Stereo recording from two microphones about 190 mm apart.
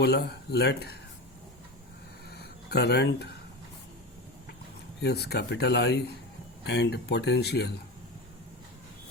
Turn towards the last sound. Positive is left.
turn(degrees=60)  # may be behind; listen again after turning